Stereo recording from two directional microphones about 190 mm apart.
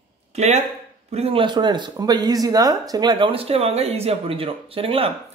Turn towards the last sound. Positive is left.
turn(degrees=-30)  # may be behind; listen again after turning